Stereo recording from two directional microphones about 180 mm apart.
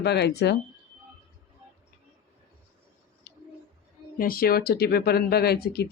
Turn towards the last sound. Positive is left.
turn(degrees=60)  # may be behind; listen again after turning